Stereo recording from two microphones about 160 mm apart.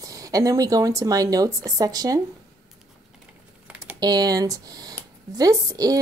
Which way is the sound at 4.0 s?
25° right (ahead or behind).